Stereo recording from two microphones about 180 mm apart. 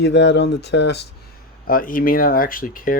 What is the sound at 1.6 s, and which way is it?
Speech, 50° left (ahead or behind).